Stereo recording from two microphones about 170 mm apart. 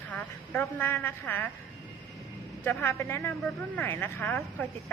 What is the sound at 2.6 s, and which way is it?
A woman's voice, 15° left (ahead or behind).